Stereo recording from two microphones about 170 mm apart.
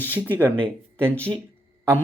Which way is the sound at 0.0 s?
10° right (ahead or behind).